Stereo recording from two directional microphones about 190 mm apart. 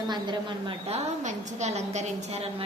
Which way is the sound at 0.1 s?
25° right (ahead or behind).